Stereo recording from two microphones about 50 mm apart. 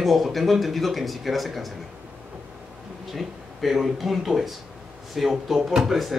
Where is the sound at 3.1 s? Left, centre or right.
Centre.